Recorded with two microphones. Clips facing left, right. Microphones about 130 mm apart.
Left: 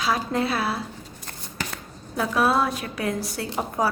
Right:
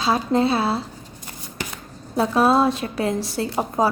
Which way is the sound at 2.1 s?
30° right (ahead or behind).